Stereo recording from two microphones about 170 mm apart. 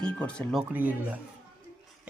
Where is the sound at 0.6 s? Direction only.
10° right (ahead or behind).